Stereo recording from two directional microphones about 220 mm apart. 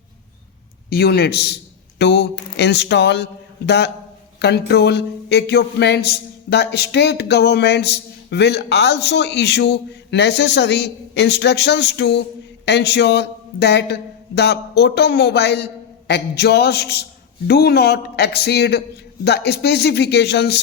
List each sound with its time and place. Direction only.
0.9 s a man's voice: 45° left (ahead or behind)
2.0 s a sound: 50° left (ahead or behind)
2.6 s a man's voice: 50° left (ahead or behind)